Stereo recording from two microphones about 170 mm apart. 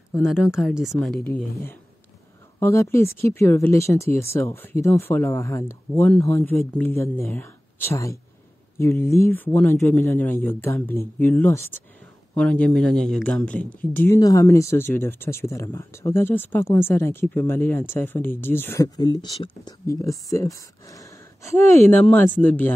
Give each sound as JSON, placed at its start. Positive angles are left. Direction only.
{"t": 0.1, "sound": "speech", "side_deg": 0}